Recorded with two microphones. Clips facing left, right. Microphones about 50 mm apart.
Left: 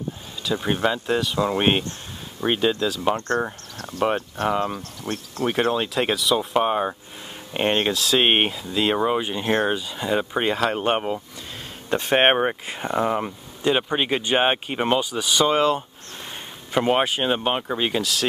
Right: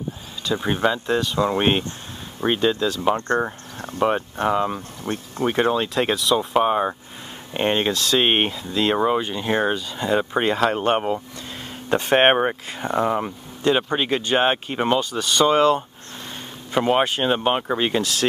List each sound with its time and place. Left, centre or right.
0.9 s speech: centre
3.2 s speech: right
4.5 s speech: centre
4.7 s speech: centre
5.5 s speech: centre
12.6 s speech: centre